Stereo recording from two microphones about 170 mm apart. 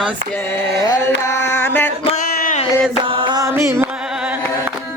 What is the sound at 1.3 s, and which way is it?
Music, 10° left (ahead or behind).